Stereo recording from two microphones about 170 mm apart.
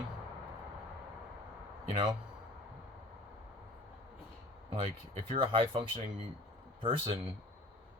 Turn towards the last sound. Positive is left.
turn(degrees=-35)  # may be behind; listen again after turning